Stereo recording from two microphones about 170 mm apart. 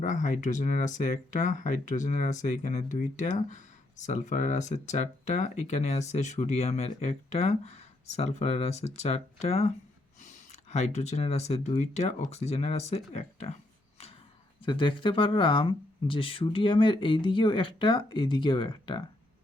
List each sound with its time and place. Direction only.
0.0 s speech: 50° left (ahead or behind)
14.6 s speech: 30° left (ahead or behind)